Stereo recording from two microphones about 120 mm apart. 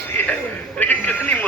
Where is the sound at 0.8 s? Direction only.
15° left (ahead or behind).